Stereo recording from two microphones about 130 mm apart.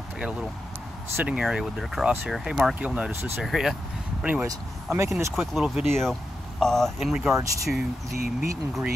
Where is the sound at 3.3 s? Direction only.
5° right (ahead or behind).